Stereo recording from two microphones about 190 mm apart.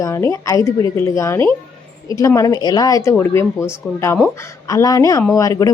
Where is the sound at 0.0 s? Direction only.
15° left (ahead or behind).